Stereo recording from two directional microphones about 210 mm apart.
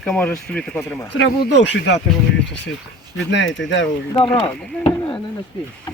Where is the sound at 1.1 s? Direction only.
55° left (ahead or behind).